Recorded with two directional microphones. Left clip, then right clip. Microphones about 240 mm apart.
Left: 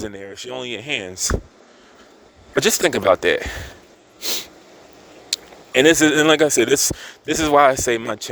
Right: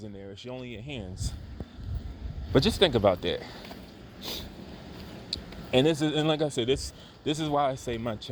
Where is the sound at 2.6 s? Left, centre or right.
Left.